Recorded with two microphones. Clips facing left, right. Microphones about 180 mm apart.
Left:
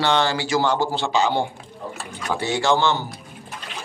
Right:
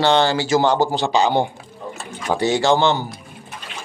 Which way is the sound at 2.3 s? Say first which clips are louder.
Right 4 dB; 40° right (ahead or behind).